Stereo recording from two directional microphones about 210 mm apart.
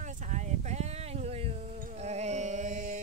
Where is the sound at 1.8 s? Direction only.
35° right (ahead or behind).